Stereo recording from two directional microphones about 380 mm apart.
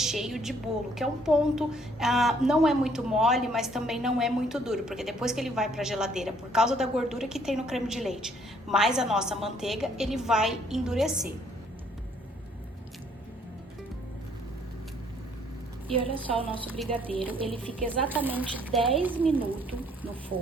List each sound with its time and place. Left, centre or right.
0.0 s a woman's voice: centre
16.1 s a woman's voice: centre